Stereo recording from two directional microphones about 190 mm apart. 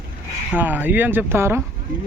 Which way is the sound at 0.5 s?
10° right (ahead or behind).